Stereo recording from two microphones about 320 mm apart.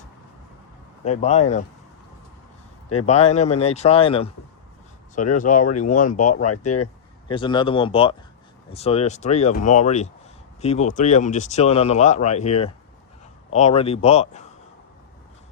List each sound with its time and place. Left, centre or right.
1.0 s speech: left
3.1 s speech: centre
5.3 s speech: left